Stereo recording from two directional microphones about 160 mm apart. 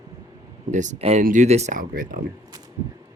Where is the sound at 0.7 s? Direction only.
50° right (ahead or behind).